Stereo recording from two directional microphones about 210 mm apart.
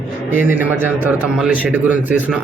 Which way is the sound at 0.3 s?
10° right (ahead or behind).